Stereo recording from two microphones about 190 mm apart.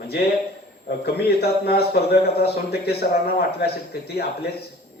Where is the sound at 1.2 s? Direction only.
55° left (ahead or behind).